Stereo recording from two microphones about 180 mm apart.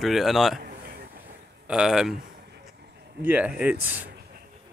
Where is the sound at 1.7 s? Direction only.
5° right (ahead or behind).